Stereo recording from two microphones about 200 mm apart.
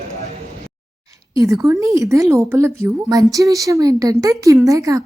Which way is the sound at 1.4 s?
15° right (ahead or behind).